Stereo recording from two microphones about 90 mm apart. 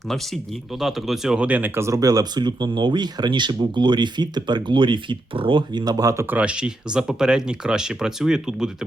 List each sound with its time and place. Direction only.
0.8 s speech: centre (ahead or behind); by 5.8 s 70° right (ahead or behind)
5.8 s speech: 45° right (ahead or behind)
6.3 s speech: 10° right (ahead or behind)